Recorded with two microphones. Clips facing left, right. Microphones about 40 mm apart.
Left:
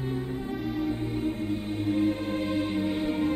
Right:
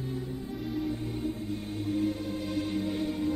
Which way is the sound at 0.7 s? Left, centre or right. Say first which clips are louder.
Left 2 dB; left.